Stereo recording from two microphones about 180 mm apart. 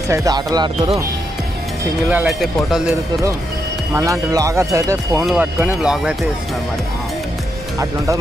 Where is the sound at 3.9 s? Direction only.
15° right (ahead or behind).